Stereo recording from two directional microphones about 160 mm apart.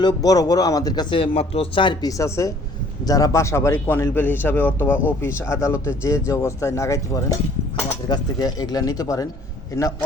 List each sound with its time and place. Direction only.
0.0 s speech: 25° left (ahead or behind)